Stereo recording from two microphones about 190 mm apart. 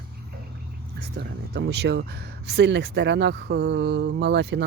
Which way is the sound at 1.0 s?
60° right (ahead or behind).